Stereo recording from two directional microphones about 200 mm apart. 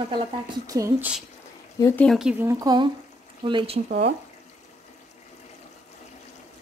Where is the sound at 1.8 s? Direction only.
5° left (ahead or behind); by 3.8 s 25° right (ahead or behind).